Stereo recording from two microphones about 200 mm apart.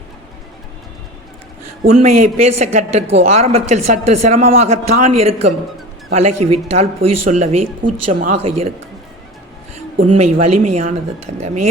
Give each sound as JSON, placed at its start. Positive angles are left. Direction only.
{"t": 1.9, "sound": "a man's voice", "side_deg": -35}
{"t": 10.4, "sound": "a man's voice", "side_deg": -35}